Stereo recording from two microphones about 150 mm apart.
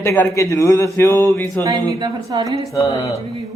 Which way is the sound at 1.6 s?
25° right (ahead or behind).